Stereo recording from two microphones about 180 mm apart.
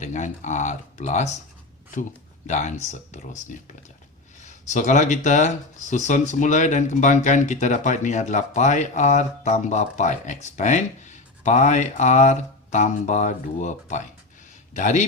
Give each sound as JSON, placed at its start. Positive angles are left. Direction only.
{"t": 0.0, "sound": "speech", "side_deg": 40}
{"t": 2.5, "sound": "speech", "side_deg": 40}